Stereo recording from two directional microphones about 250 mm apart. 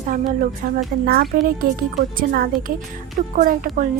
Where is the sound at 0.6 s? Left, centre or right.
Right.